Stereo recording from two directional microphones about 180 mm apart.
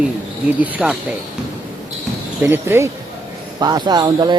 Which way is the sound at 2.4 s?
10° right (ahead or behind).